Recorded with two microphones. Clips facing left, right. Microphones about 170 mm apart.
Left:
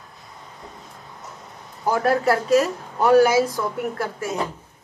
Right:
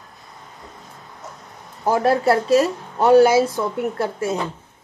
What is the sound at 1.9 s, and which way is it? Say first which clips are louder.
A woman's voice: right 2 dB; 25° right (ahead or behind).